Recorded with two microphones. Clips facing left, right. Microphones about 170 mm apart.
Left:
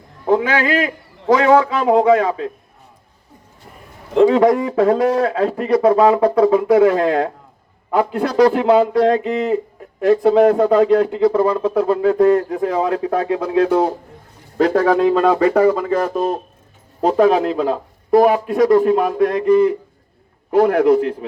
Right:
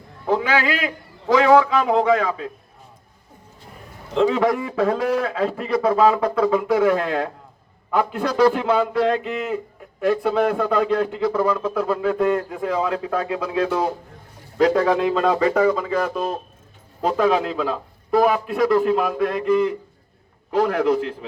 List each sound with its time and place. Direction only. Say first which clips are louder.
0.3 s a man's voice: left 4 dB; 45° left (ahead or behind)
4.3 s a man's voice: left 6 dB; 35° left (ahead or behind)
14.6 s a man's voice: left 3 dB; 50° left (ahead or behind)
20.5 s speech: left 6 dB; 50° left (ahead or behind)